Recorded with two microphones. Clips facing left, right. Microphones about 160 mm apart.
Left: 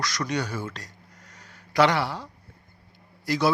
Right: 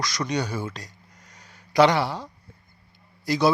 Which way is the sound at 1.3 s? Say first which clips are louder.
Right 2 dB; 15° right (ahead or behind).